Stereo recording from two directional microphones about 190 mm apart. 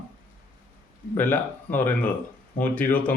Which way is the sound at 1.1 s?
10° left (ahead or behind).